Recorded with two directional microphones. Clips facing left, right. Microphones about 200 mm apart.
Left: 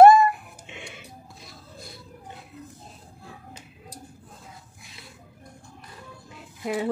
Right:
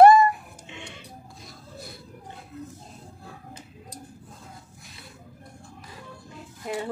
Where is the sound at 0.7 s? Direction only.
25° right (ahead or behind).